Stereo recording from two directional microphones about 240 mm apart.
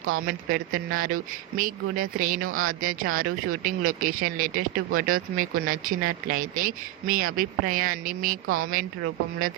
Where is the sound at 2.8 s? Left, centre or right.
Right.